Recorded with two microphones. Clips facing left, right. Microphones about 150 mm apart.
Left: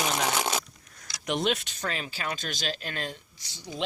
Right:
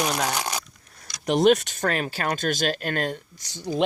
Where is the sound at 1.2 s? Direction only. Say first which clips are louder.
Right 10 dB; 40° right (ahead or behind).